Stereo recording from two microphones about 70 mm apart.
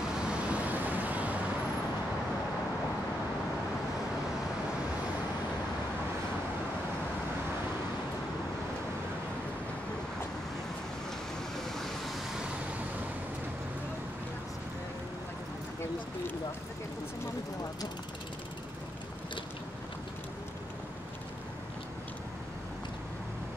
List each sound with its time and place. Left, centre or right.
0.3 s vehicle: right
11.7 s vehicle: centre